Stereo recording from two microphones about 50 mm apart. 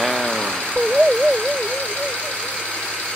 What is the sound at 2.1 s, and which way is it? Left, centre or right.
Vehicle, centre.